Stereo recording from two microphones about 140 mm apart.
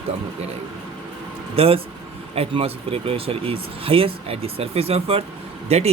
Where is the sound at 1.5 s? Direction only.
45° right (ahead or behind).